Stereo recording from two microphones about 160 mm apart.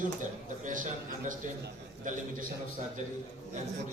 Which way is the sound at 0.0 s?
55° right (ahead or behind).